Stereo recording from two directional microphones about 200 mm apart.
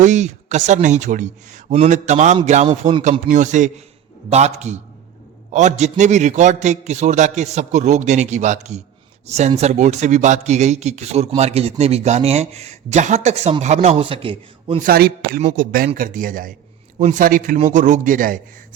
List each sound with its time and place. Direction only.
0.0 s a man's voice: 35° right (ahead or behind)
14.8 s a man's voice: 50° right (ahead or behind)